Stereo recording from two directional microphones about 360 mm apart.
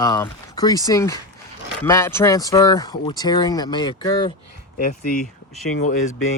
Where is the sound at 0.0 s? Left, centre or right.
Centre.